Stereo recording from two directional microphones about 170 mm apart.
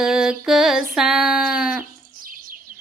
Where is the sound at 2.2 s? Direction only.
55° right (ahead or behind).